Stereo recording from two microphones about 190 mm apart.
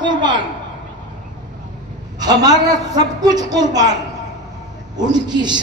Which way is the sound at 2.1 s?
20° right (ahead or behind).